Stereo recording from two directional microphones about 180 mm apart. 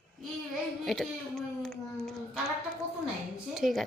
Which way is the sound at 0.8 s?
Centre (ahead or behind).